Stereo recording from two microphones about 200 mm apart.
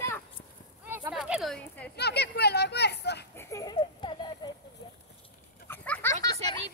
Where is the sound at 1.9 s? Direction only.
55° left (ahead or behind).